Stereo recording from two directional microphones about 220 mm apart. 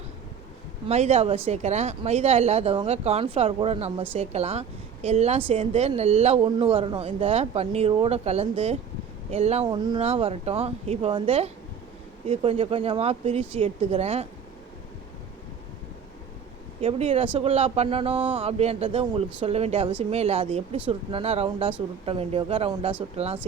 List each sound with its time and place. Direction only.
0.9 s speech: 30° right (ahead or behind)
16.8 s speech: 25° right (ahead or behind)